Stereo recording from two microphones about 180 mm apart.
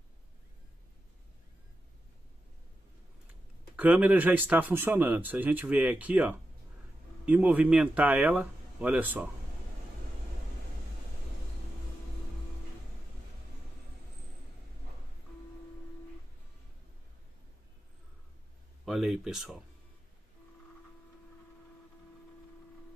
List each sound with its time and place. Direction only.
3.7 s speech: 10° right (ahead or behind)
18.9 s speech: centre (ahead or behind)